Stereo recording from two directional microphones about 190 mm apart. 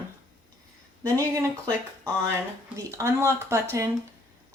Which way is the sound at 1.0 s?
15° right (ahead or behind).